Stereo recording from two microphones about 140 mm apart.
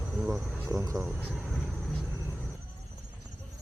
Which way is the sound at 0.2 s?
5° right (ahead or behind).